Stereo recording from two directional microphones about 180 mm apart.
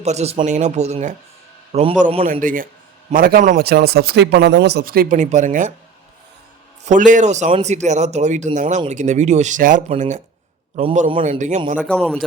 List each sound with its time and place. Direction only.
0.0 s speech: 35° right (ahead or behind)
2.2 s a man's voice: 50° right (ahead or behind)
3.7 s speech: 60° right (ahead or behind); by 5.7 s 45° right (ahead or behind)
6.8 s a man's voice: 45° right (ahead or behind)
11.9 s a man's voice: 5° left (ahead or behind)